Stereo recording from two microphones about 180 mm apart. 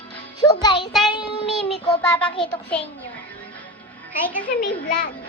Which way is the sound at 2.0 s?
5° left (ahead or behind).